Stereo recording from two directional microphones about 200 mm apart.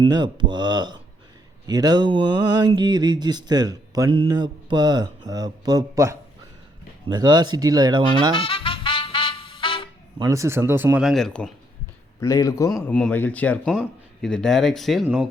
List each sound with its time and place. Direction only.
0.0 s mantra: 20° right (ahead or behind)
8.4 s music: 25° left (ahead or behind)
10.2 s speech: 15° right (ahead or behind); by 11.5 s centre (ahead or behind)
12.2 s speech: 15° left (ahead or behind); by 15.3 s 5° right (ahead or behind)